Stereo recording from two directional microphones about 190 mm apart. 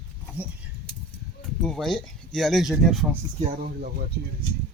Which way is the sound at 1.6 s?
Centre (ahead or behind).